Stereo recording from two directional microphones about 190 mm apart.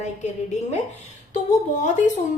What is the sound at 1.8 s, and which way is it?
Speech, 40° left (ahead or behind).